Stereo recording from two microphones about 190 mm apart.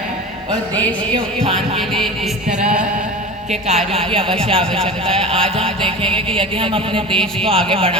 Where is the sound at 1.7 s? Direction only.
Centre (ahead or behind).